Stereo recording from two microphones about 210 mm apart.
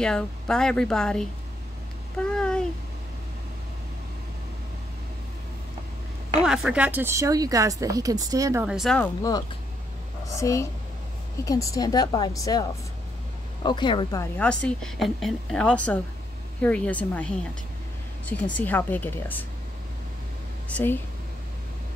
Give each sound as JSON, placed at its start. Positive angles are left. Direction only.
{"t": 0.0, "sound": "a woman's voice", "side_deg": 5}
{"t": 6.4, "sound": "speech", "side_deg": -5}
{"t": 8.6, "sound": "a woman's voice", "side_deg": 0}
{"t": 10.2, "sound": "a woman's voice", "side_deg": 15}
{"t": 14.3, "sound": "a woman's voice", "side_deg": 5}
{"t": 20.6, "sound": "speech", "side_deg": 10}